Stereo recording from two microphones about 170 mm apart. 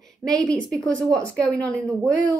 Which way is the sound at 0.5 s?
5° left (ahead or behind).